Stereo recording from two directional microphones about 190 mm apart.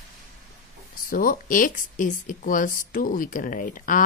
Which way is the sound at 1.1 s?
50° left (ahead or behind).